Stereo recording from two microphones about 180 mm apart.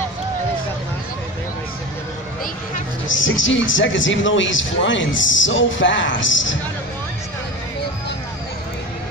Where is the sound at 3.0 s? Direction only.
90° left.